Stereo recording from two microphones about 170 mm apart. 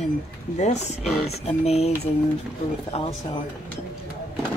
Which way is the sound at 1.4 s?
35° left (ahead or behind).